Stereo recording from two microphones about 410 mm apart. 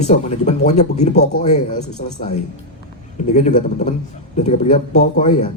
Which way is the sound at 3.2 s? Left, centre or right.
Centre.